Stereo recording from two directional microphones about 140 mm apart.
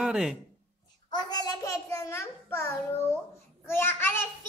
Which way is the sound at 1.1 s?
30° left (ahead or behind).